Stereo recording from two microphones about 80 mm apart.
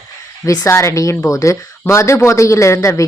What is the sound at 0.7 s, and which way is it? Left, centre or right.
Speech, left.